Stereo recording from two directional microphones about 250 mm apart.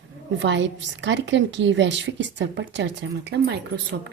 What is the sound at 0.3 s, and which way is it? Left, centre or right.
A woman's voice, right.